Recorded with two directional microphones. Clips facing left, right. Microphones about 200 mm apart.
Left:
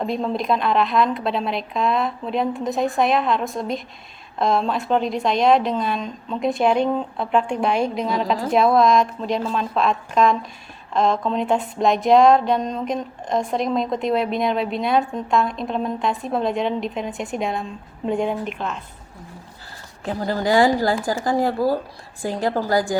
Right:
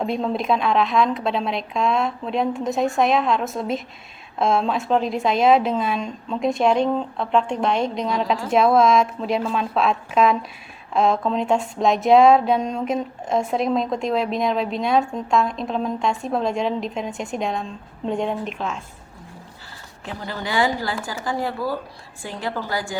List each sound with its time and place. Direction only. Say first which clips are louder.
0.0 s speech: even; centre (ahead or behind)
20.1 s a woman's voice: left 8 dB; 40° left (ahead or behind)